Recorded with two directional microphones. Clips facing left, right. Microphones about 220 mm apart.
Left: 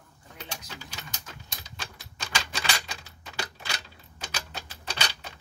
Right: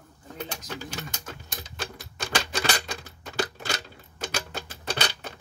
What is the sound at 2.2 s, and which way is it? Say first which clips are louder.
Typewriter: right 6 dB; 55° right (ahead or behind).